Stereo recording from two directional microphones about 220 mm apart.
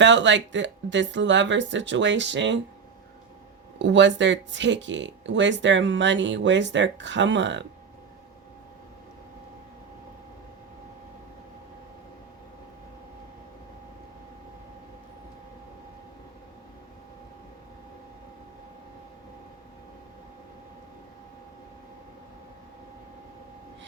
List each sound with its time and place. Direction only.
0.0 s speech: 55° right (ahead or behind)
3.8 s speech: 55° right (ahead or behind)